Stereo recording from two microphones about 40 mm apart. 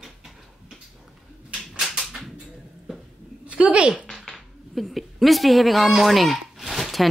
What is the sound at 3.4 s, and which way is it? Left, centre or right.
Speech, right.